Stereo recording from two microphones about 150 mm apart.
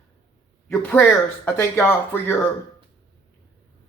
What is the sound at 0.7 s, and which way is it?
Speech, 10° left (ahead or behind).